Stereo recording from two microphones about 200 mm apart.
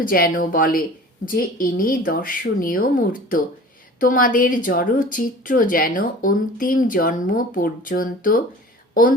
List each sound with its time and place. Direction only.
0.1 s a woman's voice: 45° left (ahead or behind)